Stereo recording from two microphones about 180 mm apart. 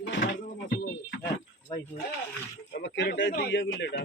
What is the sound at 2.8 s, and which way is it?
Speech, 75° left (ahead or behind).